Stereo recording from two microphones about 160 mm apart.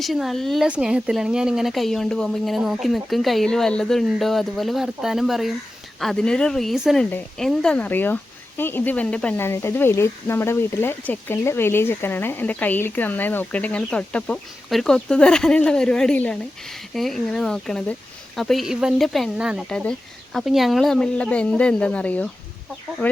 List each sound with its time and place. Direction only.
0.0 s speech: centre (ahead or behind)